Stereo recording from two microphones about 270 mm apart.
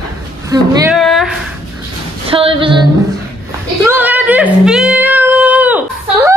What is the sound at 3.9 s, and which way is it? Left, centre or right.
Female singing, centre.